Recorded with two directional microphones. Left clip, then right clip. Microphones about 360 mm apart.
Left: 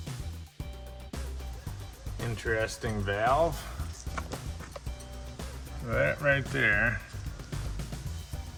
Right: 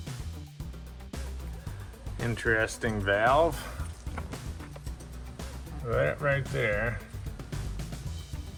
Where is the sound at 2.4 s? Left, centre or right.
Right.